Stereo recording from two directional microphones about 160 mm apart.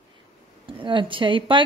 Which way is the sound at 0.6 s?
30° right (ahead or behind).